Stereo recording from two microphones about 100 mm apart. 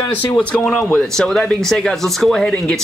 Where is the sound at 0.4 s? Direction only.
10° left (ahead or behind).